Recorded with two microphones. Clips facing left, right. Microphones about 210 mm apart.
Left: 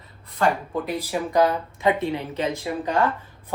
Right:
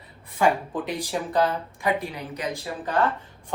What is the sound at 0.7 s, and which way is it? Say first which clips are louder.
Speech: left 2 dB; centre (ahead or behind).